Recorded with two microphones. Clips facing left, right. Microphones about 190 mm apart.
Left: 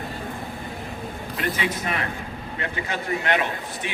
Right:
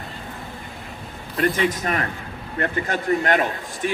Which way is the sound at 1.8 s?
45° right (ahead or behind).